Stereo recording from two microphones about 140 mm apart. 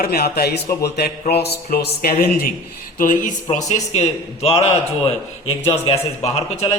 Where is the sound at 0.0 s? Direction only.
90° left.